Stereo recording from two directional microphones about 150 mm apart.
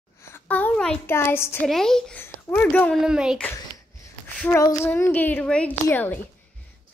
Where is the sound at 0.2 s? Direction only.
10° left (ahead or behind).